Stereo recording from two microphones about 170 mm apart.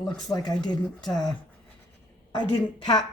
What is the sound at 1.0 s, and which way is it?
Speech, centre (ahead or behind).